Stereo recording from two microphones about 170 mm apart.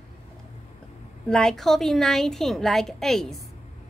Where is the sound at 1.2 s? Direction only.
5° left (ahead or behind).